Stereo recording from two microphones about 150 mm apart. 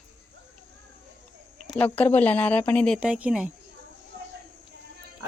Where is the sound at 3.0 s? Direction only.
10° right (ahead or behind).